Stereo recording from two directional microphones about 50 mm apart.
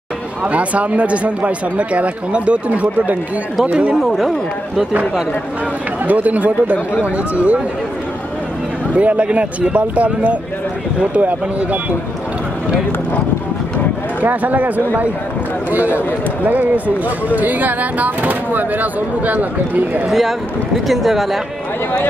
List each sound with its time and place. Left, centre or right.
0.4 s speech: right
6.0 s speech: right
8.9 s speech: right
14.2 s speech: right
15.7 s speech: right
20.1 s speech: centre